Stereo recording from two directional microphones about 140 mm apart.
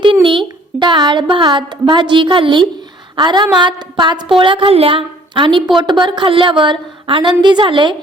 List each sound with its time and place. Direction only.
0.0 s speech: 35° right (ahead or behind)